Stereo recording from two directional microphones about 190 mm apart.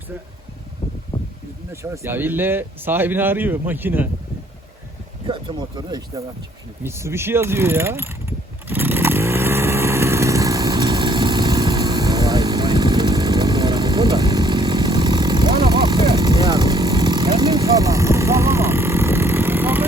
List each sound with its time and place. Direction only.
1.1 s a sound: 25° left (ahead or behind)
1.7 s speech: 15° right (ahead or behind)
5.2 s speech: 25° right (ahead or behind)
8.6 s motorcycle: 10° right (ahead or behind)